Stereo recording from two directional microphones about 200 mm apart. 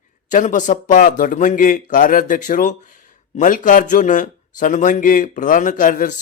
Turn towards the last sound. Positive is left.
turn(degrees=40)  # may be behind; listen again after turning